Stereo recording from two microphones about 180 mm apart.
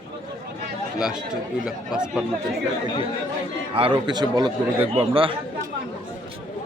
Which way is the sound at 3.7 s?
30° right (ahead or behind).